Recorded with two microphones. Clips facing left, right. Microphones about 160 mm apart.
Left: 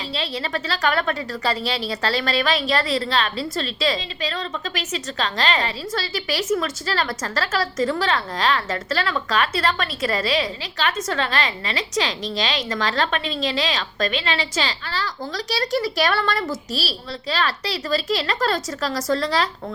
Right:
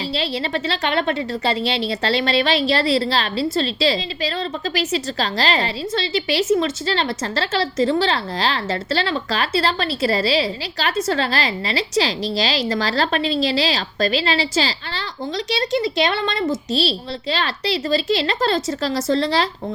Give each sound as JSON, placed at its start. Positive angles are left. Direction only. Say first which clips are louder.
{"t": 0.1, "sound": "a woman's voice", "louder": "right 2 dB", "side_deg": -30}